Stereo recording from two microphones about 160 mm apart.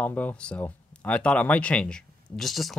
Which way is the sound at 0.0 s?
10° left (ahead or behind).